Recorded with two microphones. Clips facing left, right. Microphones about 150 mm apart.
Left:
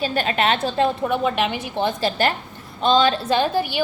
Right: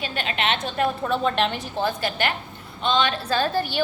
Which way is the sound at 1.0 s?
10° left (ahead or behind).